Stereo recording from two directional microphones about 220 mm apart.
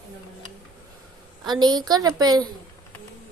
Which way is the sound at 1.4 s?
20° right (ahead or behind).